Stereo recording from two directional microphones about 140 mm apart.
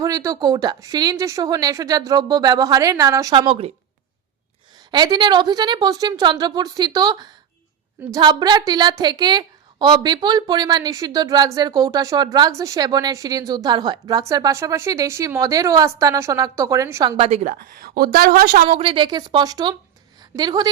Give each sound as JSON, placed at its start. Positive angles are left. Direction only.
{"t": 0.0, "sound": "a woman's voice", "side_deg": -25}
{"t": 3.3, "sound": "speech", "side_deg": -40}
{"t": 4.9, "sound": "a woman's voice", "side_deg": -30}
{"t": 17.2, "sound": "a woman's voice", "side_deg": -45}
{"t": 17.4, "sound": "a woman's voice", "side_deg": -90}
{"t": 18.7, "sound": "a woman's voice", "side_deg": -40}